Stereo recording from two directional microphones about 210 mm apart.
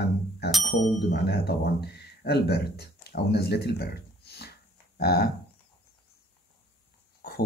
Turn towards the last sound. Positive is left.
turn(degrees=50)  # may be behind; listen again after turning